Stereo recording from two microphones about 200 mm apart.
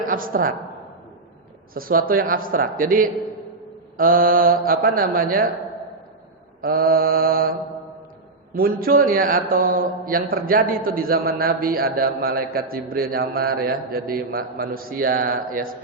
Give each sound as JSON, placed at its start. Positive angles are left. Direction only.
{"t": 0.0, "sound": "a woman's voice", "side_deg": -45}
{"t": 1.7, "sound": "a man's voice", "side_deg": -45}
{"t": 6.6, "sound": "a man's voice", "side_deg": -45}
{"t": 8.5, "sound": "a man's voice", "side_deg": -45}